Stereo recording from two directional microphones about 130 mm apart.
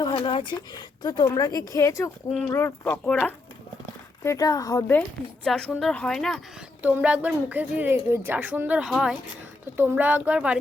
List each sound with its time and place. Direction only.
0.1 s a woman's voice: 45° left (ahead or behind); by 3.0 s 15° left (ahead or behind)
3.1 s speech: 5° left (ahead or behind)
4.2 s speech: 25° left (ahead or behind)
4.9 s a woman's voice: 10° left (ahead or behind)
6.8 s speech: 10° right (ahead or behind)